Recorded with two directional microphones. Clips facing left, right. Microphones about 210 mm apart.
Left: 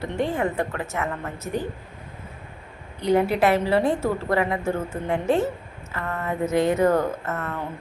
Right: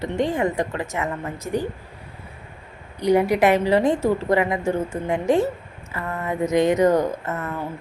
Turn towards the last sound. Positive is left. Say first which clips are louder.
# right 1 dB
turn(degrees=-15)  # may be behind; listen again after turning